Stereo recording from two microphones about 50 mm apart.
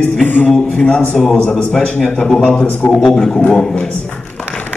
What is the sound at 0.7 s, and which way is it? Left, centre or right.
A man's voice, left.